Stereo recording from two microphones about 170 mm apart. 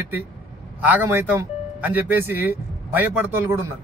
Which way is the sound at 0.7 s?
10° right (ahead or behind).